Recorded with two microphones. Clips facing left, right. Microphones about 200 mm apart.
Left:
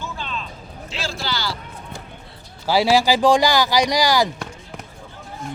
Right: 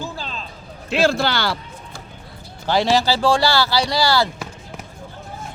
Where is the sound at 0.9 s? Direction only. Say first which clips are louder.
Right 10 dB; 60° right (ahead or behind).